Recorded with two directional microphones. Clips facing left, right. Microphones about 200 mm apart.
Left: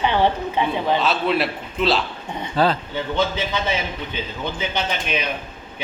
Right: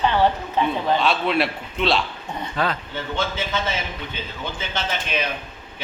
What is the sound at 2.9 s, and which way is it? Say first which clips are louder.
Speech: left 4 dB; 15° left (ahead or behind).